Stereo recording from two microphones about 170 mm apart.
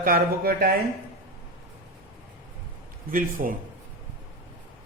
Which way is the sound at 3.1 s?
55° right (ahead or behind).